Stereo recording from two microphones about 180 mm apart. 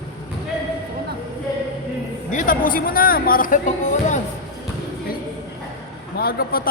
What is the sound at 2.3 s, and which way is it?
Speech, 45° left (ahead or behind).